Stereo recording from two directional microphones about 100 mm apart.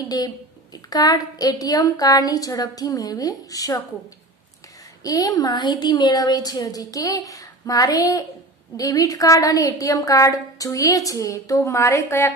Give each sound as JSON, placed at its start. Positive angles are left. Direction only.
{"t": 0.8, "sound": "a woman's voice", "side_deg": 40}
{"t": 5.0, "sound": "a woman's voice", "side_deg": 40}